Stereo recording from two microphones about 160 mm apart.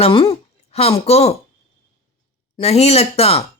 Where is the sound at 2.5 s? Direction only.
40° left (ahead or behind).